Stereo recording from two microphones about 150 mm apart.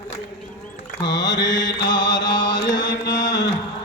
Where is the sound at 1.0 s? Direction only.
25° left (ahead or behind).